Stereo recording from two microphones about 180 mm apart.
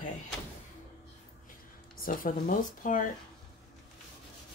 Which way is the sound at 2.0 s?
50° left (ahead or behind).